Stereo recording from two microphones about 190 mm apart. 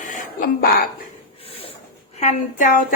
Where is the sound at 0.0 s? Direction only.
45° left (ahead or behind).